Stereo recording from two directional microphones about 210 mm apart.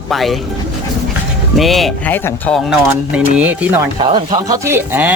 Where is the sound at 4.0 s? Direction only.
25° right (ahead or behind).